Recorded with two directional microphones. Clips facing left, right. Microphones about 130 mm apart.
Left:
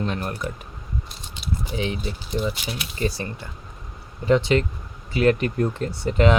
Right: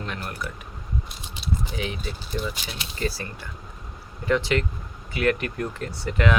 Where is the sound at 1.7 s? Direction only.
25° left (ahead or behind).